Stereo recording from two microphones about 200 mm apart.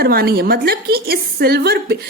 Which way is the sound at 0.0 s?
50° right (ahead or behind).